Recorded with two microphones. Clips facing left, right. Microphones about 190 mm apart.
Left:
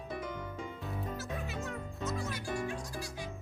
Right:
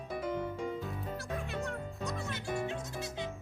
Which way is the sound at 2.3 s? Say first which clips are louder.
Right 1 dB; 25° right (ahead or behind).